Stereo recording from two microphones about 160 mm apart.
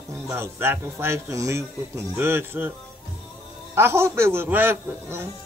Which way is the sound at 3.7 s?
15° right (ahead or behind).